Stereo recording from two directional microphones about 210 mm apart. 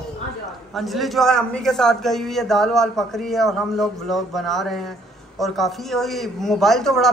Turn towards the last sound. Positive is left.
turn(degrees=0)  # may be behind; listen again after turning